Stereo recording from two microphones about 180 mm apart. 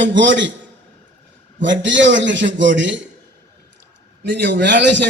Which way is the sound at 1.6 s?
90° right.